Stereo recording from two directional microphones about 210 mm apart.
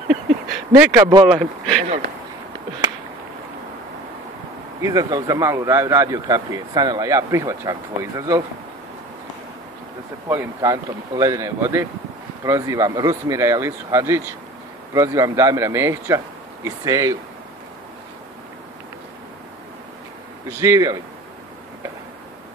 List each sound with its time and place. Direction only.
0.7 s speech: 10° right (ahead or behind)
1.0 s speech: 20° right (ahead or behind)
1.3 s a sound: centre (ahead or behind)
4.8 s speech: 15° right (ahead or behind)
10.2 s speech: 10° right (ahead or behind)
20.4 s speech: 15° right (ahead or behind)